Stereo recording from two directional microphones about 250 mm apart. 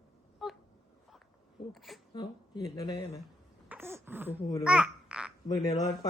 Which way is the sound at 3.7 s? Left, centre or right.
Centre.